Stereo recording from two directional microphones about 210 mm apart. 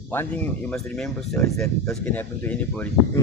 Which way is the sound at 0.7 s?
Centre (ahead or behind).